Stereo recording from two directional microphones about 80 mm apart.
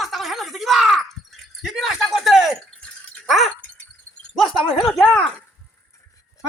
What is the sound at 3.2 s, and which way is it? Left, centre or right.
Wind chime, centre.